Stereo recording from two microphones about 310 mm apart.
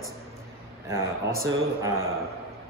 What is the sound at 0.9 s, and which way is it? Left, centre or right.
Speech, centre.